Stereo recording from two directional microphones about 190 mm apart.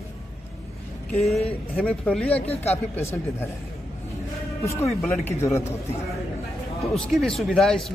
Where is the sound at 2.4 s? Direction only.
30° left (ahead or behind).